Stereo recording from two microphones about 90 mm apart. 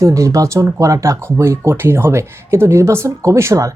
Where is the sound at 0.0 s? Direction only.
35° right (ahead or behind).